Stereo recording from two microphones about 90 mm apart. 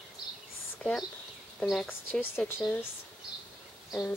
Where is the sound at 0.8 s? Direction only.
10° left (ahead or behind).